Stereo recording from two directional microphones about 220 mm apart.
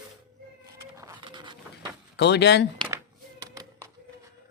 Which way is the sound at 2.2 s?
50° left (ahead or behind).